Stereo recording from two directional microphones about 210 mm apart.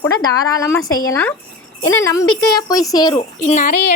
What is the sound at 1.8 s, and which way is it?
Speech, 70° left (ahead or behind).